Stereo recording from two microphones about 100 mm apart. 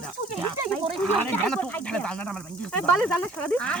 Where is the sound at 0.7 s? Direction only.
10° left (ahead or behind).